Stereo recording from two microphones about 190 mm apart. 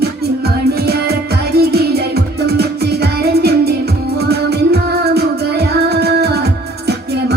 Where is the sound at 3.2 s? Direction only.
55° right (ahead or behind).